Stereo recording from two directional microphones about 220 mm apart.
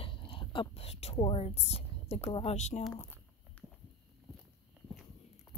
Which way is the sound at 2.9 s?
10° left (ahead or behind).